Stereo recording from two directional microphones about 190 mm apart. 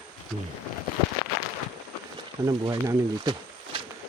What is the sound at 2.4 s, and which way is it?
Speech, 20° right (ahead or behind).